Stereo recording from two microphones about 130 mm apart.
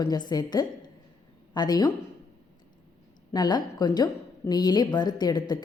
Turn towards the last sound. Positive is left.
turn(degrees=35)  # may be behind; listen again after turning